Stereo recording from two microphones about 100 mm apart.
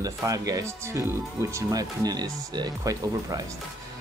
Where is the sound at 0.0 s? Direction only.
35° right (ahead or behind).